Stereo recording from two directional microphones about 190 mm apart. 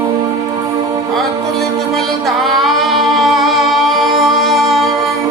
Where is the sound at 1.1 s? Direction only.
Centre (ahead or behind).